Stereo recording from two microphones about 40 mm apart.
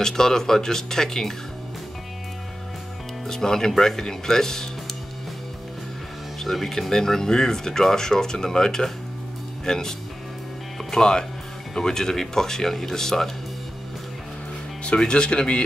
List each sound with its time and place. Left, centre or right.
0.0 s speech: centre
3.3 s speech: centre
6.4 s speech: centre
15.0 s speech: left